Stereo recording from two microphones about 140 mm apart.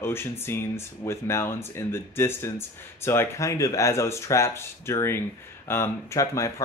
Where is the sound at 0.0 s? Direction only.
15° left (ahead or behind).